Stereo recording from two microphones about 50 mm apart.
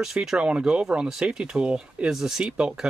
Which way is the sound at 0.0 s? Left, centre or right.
Centre.